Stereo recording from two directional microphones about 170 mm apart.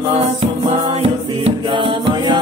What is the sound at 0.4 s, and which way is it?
Music, 35° right (ahead or behind).